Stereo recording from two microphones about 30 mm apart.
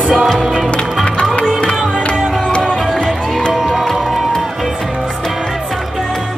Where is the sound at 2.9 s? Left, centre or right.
Centre.